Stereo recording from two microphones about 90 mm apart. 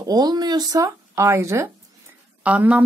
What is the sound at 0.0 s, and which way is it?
Speech, 45° right (ahead or behind).